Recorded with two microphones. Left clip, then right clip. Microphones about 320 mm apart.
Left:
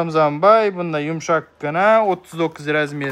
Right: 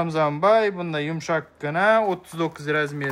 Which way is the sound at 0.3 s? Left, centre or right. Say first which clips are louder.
Left 4 dB; left.